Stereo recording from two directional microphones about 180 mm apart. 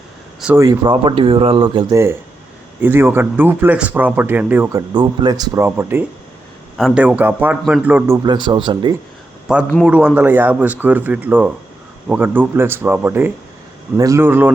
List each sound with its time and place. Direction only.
0.5 s speech: 20° right (ahead or behind)
4.9 s speech: 20° right (ahead or behind)
9.5 s a man's voice: 5° right (ahead or behind)